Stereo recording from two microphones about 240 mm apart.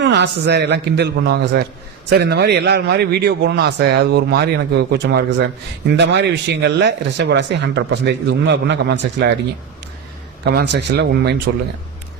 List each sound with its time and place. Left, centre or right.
0.0 s a man's voice: right
10.4 s a man's voice: right